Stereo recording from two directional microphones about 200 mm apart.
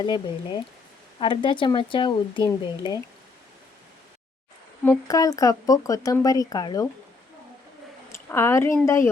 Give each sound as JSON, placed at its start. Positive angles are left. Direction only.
{"t": 0.0, "sound": "speech", "side_deg": 20}
{"t": 4.9, "sound": "speech", "side_deg": 15}
{"t": 8.1, "sound": "a woman's voice", "side_deg": 10}